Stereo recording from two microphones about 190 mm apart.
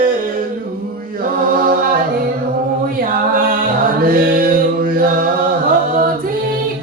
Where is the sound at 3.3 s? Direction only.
45° right (ahead or behind).